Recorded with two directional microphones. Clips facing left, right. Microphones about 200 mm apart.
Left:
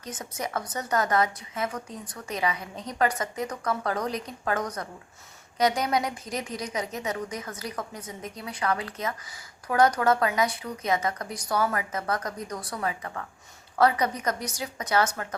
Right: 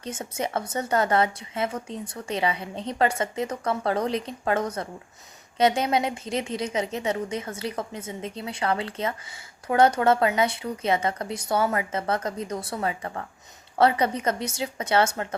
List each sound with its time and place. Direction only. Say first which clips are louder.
0.0 s a woman's voice: right 4 dB; 25° right (ahead or behind)